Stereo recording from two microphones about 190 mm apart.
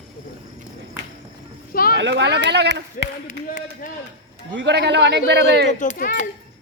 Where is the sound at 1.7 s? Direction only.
50° left (ahead or behind).